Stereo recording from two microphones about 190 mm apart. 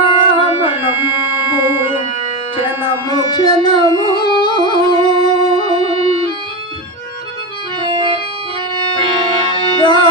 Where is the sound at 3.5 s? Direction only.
30° right (ahead or behind).